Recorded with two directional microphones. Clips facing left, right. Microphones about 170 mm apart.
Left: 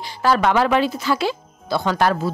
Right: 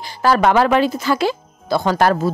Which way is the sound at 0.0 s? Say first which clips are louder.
Right 3 dB; 45° right (ahead or behind).